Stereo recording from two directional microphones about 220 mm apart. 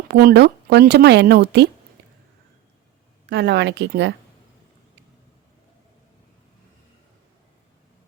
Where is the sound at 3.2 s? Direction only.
50° right (ahead or behind).